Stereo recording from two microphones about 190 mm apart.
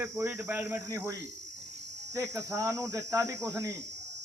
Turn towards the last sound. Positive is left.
turn(degrees=-15)  # may be behind; listen again after turning